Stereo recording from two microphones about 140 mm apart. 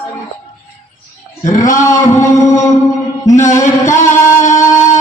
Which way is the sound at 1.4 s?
65° left (ahead or behind).